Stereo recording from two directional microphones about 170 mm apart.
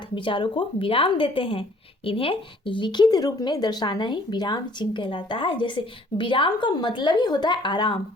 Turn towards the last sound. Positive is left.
turn(degrees=25)  # may be behind; listen again after turning